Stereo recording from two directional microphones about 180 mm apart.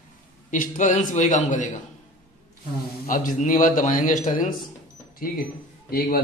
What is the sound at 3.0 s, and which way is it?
A man's voice, 50° left (ahead or behind).